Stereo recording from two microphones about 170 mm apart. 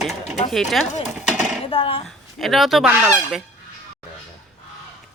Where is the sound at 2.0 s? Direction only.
Centre (ahead or behind).